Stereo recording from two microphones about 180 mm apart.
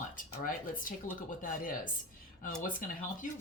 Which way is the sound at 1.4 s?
50° left (ahead or behind).